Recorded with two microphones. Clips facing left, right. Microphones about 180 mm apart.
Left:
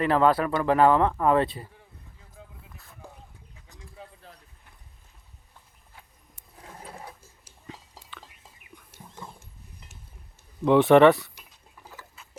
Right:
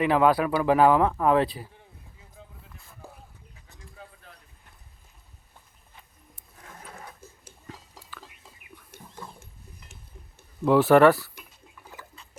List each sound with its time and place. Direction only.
0.0 s speech: 5° right (ahead or behind)
2.6 s a sound: centre (ahead or behind)
3.9 s a sound: 30° left (ahead or behind)
6.6 s sewing machine: 30° left (ahead or behind)
9.2 s wild animals: 25° left (ahead or behind)
10.7 s speech: centre (ahead or behind)